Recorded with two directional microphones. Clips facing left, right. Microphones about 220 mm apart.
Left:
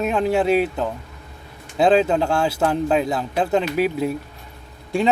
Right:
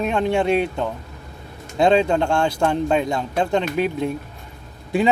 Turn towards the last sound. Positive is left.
turn(degrees=0)  # may be behind; listen again after turning